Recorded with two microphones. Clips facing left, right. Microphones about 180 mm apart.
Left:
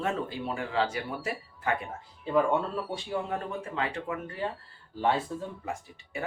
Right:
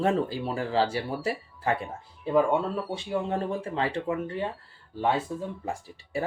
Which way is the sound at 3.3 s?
30° right (ahead or behind).